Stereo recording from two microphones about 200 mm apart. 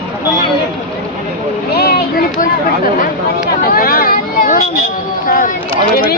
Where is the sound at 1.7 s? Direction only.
50° left (ahead or behind).